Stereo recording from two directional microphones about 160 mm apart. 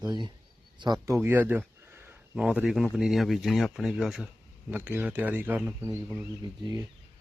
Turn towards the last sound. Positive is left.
turn(degrees=-25)  # may be behind; listen again after turning